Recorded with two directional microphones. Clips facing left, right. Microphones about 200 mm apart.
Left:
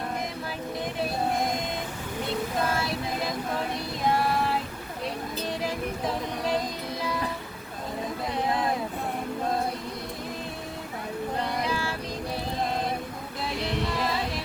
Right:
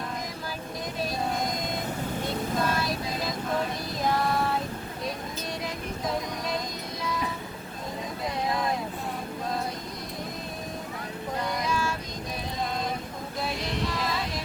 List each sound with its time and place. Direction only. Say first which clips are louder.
2.6 s music: even; 30° left (ahead or behind)
5.6 s music: left 2 dB; 30° left (ahead or behind)
8.4 s a sound: left 2 dB; 30° left (ahead or behind)
11.3 s music: right 2 dB; 30° left (ahead or behind)